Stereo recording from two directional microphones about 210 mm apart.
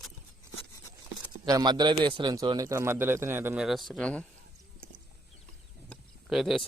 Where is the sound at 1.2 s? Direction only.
15° right (ahead or behind); by 4.2 s 5° left (ahead or behind).